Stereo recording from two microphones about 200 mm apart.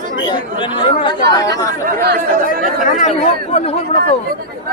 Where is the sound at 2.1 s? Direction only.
45° right (ahead or behind).